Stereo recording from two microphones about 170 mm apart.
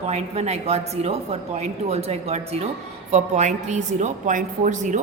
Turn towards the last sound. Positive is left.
turn(degrees=-45)  # may be behind; listen again after turning